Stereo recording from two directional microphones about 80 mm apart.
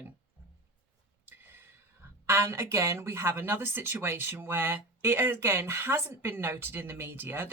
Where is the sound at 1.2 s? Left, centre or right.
Right.